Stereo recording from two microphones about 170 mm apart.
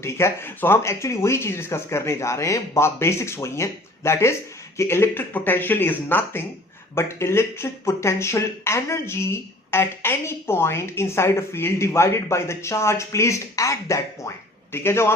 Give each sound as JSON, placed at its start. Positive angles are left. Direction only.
{"t": 0.0, "sound": "speech", "side_deg": 15}